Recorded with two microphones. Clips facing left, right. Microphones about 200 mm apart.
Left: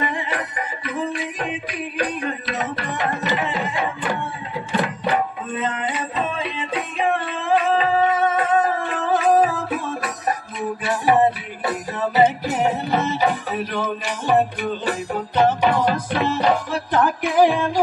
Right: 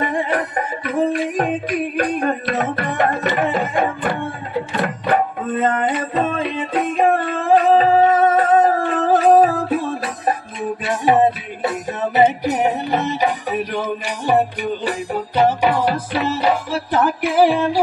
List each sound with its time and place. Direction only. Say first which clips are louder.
0.0 s music: right 5 dB; 50° right (ahead or behind); by 17.6 s 5° right (ahead or behind)